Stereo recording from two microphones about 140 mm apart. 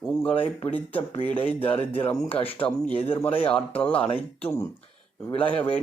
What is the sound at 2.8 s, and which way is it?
Speech, 45° left (ahead or behind).